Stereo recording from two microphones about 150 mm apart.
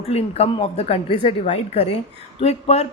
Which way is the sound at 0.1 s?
45° left (ahead or behind).